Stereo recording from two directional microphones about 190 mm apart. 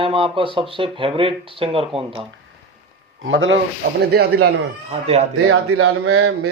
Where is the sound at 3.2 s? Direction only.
85° right.